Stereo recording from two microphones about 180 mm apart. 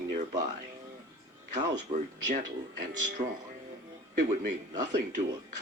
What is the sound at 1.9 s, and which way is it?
Speech, 45° right (ahead or behind).